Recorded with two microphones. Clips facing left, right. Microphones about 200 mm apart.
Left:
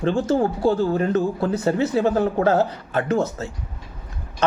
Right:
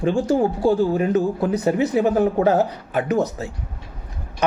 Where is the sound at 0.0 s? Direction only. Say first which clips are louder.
Right 1 dB; 15° right (ahead or behind).